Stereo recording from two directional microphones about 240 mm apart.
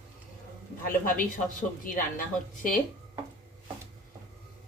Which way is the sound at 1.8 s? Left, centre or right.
Left.